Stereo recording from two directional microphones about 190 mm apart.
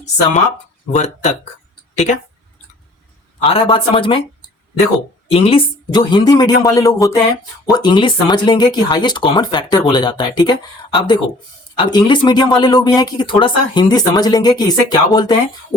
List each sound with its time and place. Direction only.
0.9 s speech: 35° left (ahead or behind)
3.4 s speech: 30° left (ahead or behind)
5.3 s speech: 30° left (ahead or behind)